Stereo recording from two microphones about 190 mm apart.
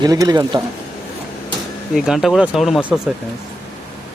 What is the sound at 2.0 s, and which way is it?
Speech, centre (ahead or behind).